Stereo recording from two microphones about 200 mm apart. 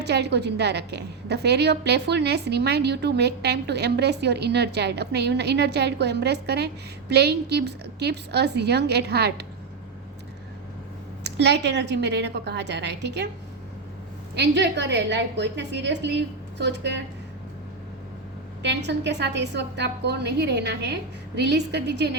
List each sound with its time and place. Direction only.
0.0 s a woman's voice: 55° right (ahead or behind)
11.2 s a woman's voice: 60° right (ahead or behind)
14.3 s a woman's voice: 60° right (ahead or behind)
18.6 s a woman's voice: 60° right (ahead or behind)